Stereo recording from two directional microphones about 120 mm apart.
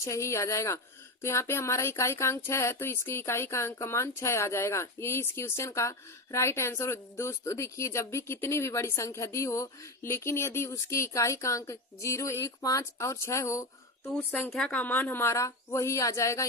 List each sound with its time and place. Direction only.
0.0 s speech: 25° left (ahead or behind)